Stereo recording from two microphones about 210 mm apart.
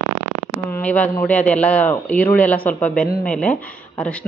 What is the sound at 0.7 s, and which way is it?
A man's voice, 5° left (ahead or behind).